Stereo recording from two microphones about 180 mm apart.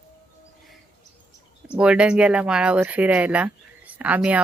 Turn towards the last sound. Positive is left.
turn(degrees=-10)  # may be behind; listen again after turning